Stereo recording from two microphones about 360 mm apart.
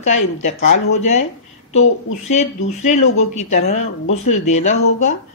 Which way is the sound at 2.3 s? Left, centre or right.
Centre.